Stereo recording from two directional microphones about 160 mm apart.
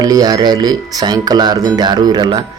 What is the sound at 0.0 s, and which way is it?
Speech, 25° right (ahead or behind).